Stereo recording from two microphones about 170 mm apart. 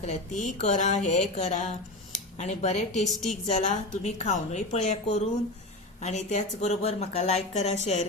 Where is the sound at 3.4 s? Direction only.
40° left (ahead or behind).